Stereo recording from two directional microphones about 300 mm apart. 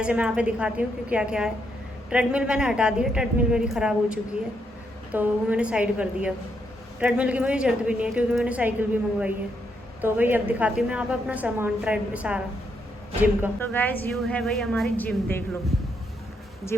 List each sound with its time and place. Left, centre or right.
0.0 s a woman's voice: centre
13.6 s a woman's voice: centre